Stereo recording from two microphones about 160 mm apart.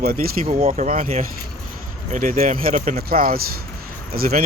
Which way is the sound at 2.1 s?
55° right (ahead or behind).